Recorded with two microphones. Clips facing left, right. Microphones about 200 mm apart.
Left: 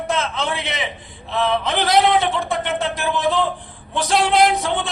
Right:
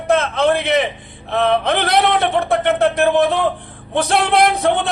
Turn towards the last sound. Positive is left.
turn(degrees=-60)  # may be behind; listen again after turning